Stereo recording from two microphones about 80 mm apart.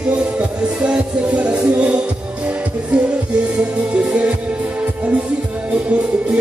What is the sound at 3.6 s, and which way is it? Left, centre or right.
Music, centre.